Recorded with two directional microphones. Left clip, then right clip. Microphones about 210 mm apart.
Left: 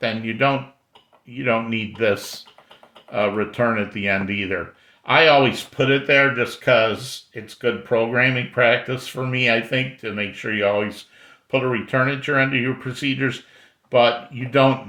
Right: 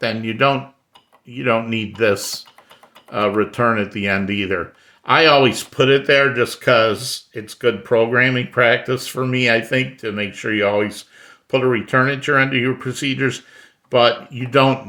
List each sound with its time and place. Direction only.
0.0 s speech: 40° right (ahead or behind)